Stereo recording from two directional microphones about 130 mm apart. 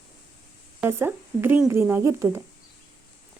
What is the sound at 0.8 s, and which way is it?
Speech, 20° right (ahead or behind).